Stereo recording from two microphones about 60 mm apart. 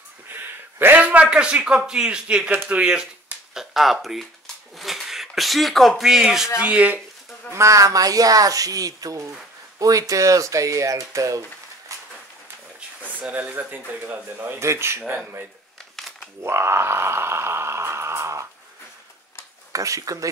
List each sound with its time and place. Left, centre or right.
0.3 s a sound: right
0.9 s a man's voice: right
3.5 s speech: centre
6.6 s speech: right
7.5 s speech: right
11.9 s a sound: right
13.3 s speech: right
14.6 s speech: right
15.0 s speech: right
16.0 s a sound: centre
16.3 s groan: right
19.7 s speech: right